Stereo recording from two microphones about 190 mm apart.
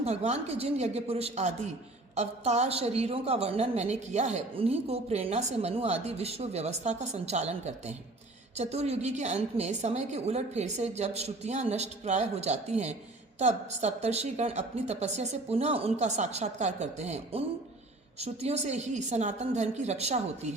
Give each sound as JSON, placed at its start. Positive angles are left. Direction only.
{"t": 0.0, "sound": "a woman's voice", "side_deg": -35}